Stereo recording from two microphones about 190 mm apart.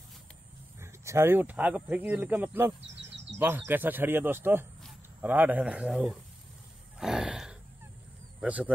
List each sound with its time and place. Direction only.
0.7 s speech: 15° right (ahead or behind)
2.9 s a sound: 70° right (ahead or behind)
3.3 s speech: 10° right (ahead or behind)
7.0 s gasp: centre (ahead or behind)
8.4 s speech: 5° right (ahead or behind)